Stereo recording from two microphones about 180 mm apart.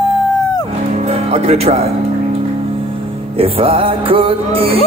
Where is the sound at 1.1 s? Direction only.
35° right (ahead or behind).